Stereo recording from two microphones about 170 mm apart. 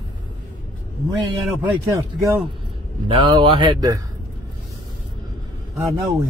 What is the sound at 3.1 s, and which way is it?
Speech, 30° right (ahead or behind).